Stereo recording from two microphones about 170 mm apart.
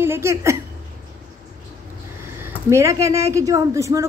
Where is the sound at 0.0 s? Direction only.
15° right (ahead or behind).